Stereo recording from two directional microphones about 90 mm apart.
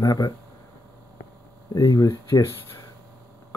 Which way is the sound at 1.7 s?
40° left (ahead or behind).